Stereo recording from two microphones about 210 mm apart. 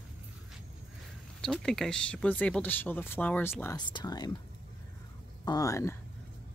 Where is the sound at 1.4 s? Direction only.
Centre (ahead or behind); by 4.4 s 20° left (ahead or behind).